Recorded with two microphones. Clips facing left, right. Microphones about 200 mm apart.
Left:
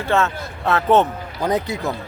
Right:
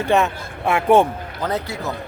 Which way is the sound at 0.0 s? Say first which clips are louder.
Right 2 dB; 15° right (ahead or behind).